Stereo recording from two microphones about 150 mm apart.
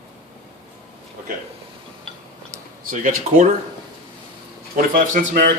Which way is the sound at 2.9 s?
60° right (ahead or behind).